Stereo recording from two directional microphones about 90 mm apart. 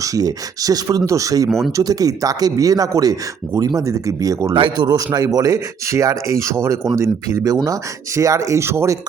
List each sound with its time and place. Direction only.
0.0 s speech: 40° right (ahead or behind)
1.5 s speech: centre (ahead or behind)
1.7 s speech: 45° right (ahead or behind)
4.5 s speech: 65° right (ahead or behind)
4.9 s speech: 45° right (ahead or behind)